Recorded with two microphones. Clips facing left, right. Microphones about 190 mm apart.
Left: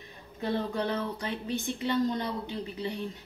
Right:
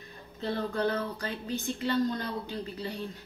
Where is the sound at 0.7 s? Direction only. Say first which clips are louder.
Right 1 dB; 20° left (ahead or behind).